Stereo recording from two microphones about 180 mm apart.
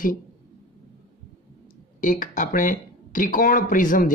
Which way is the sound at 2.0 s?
50° left (ahead or behind).